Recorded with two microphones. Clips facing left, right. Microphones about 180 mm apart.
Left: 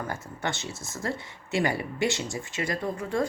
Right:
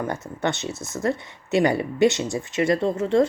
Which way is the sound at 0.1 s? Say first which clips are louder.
Right 7 dB; 20° right (ahead or behind).